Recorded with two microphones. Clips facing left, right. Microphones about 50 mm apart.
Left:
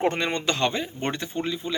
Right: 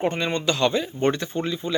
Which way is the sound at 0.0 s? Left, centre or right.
Left.